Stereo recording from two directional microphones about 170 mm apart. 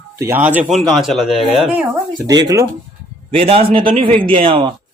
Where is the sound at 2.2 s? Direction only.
20° right (ahead or behind).